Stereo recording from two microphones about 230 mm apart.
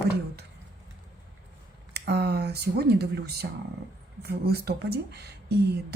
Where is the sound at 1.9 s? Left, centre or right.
Right.